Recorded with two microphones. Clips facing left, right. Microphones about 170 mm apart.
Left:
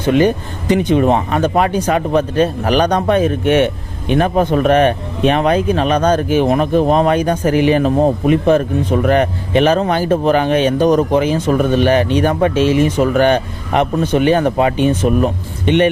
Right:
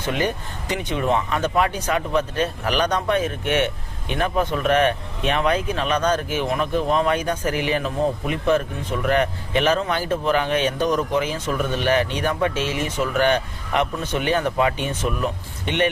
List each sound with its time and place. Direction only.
0.7 s speech: 35° left (ahead or behind)
7.8 s speech: 45° left (ahead or behind)
10.8 s speech: 45° left (ahead or behind)
11.2 s speech: 30° left (ahead or behind)
11.5 s speech: 45° left (ahead or behind)